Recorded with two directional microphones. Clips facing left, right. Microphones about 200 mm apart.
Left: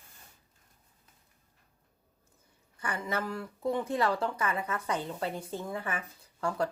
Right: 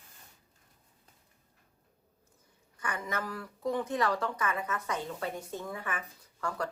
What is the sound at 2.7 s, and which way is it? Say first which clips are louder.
Speech: left 2 dB; 30° left (ahead or behind).